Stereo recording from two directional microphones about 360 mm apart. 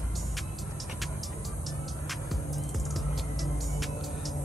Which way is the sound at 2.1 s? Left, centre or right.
Centre.